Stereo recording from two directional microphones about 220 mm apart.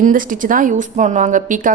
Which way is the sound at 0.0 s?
35° right (ahead or behind).